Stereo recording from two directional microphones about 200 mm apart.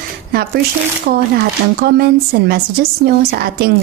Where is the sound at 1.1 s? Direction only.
55° right (ahead or behind).